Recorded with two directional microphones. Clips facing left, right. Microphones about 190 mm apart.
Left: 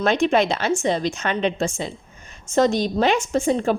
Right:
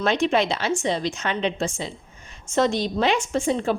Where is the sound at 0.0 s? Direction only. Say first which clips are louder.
Left 3 dB; 50° left (ahead or behind).